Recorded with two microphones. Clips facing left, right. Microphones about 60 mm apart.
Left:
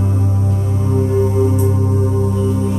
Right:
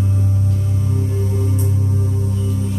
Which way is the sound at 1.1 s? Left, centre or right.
Left.